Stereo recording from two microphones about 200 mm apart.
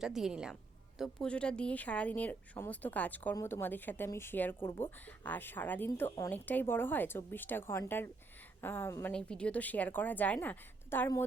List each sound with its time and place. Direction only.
0.0 s a woman's voice: centre (ahead or behind)